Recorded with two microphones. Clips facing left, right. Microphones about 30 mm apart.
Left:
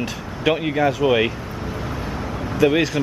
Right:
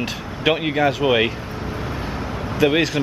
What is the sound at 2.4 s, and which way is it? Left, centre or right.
Vehicle, centre.